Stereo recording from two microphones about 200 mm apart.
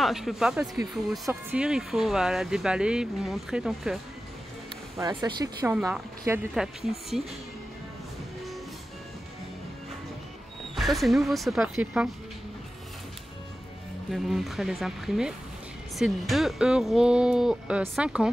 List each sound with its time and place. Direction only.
0.0 s speech: centre (ahead or behind)
4.9 s speech: 15° right (ahead or behind)
6.2 s speech: 5° right (ahead or behind)
10.8 s speech: centre (ahead or behind)
14.1 s speech: centre (ahead or behind)